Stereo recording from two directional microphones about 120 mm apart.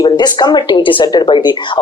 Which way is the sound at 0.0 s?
35° left (ahead or behind).